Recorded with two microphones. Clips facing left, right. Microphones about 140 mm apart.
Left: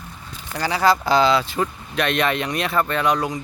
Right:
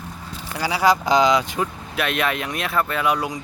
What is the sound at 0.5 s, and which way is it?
Speech, 10° right (ahead or behind).